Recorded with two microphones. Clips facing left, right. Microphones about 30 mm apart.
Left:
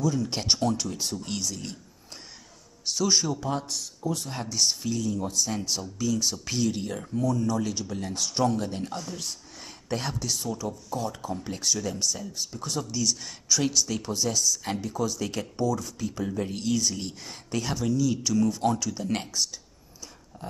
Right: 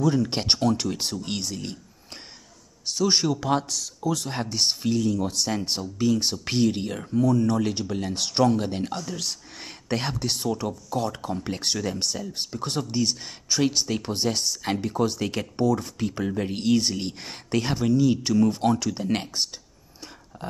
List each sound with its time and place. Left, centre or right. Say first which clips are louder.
0.0 s speech: right 4 dB; right
0.3 s speech: right 3 dB; right
3.3 s speech: right 5 dB; right
4.3 s speech: right 2 dB; right
5.7 s speech: right 4 dB; right
7.2 s speech: right 5 dB; right
8.9 s speech: right 4 dB; right
9.6 s speech: right 3 dB; right
16.3 s speech: right 6 dB; right